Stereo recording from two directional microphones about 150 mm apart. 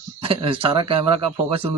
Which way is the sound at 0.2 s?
40° right (ahead or behind).